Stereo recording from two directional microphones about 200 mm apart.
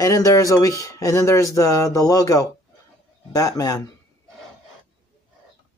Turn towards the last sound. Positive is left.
turn(degrees=15)  # may be behind; listen again after turning